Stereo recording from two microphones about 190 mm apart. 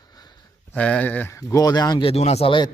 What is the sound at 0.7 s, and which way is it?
Speech, 5° left (ahead or behind).